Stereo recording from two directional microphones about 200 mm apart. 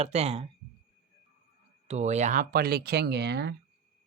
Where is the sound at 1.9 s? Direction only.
35° right (ahead or behind).